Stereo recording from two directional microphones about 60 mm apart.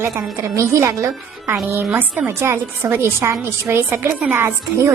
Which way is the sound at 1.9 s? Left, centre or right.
Right.